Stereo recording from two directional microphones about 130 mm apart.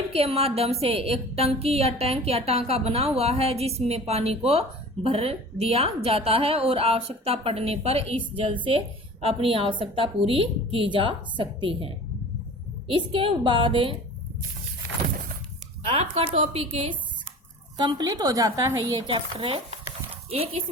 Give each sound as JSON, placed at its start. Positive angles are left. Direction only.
{"t": 0.1, "sound": "a woman's voice", "side_deg": -50}
{"t": 9.2, "sound": "a woman's voice", "side_deg": -45}
{"t": 15.9, "sound": "a woman's voice", "side_deg": -50}
{"t": 17.7, "sound": "a woman's voice", "side_deg": -35}
{"t": 19.0, "sound": "a woman's voice", "side_deg": -40}